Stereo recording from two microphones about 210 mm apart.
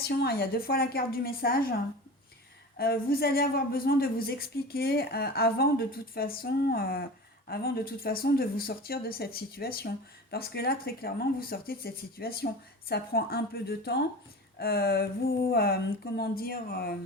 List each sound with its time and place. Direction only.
0.1 s speech: 50° left (ahead or behind)